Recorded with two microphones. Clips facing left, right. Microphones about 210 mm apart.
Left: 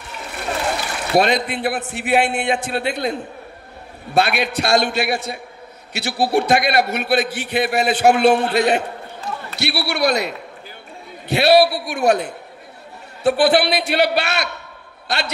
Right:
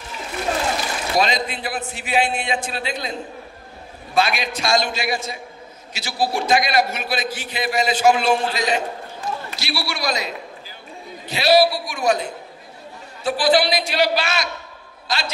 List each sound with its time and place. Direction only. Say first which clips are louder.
0.2 s a man's voice: right 1 dB; 65° left (ahead or behind)